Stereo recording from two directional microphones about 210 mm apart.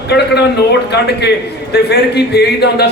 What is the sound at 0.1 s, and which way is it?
Speech, 50° left (ahead or behind).